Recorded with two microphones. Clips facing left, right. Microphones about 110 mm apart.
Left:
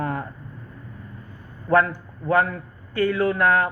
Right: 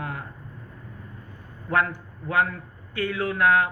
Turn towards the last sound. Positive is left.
turn(degrees=40)  # may be behind; listen again after turning